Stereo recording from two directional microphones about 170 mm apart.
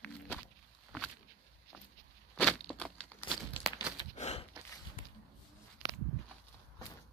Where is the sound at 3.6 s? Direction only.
Centre (ahead or behind).